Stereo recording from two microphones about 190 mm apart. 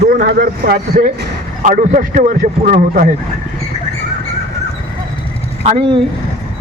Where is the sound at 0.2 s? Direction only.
55° right (ahead or behind).